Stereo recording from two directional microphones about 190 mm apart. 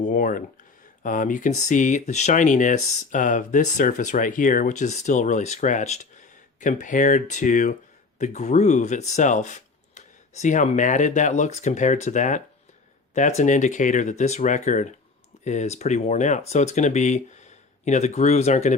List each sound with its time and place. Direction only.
0.0 s speech: 45° left (ahead or behind)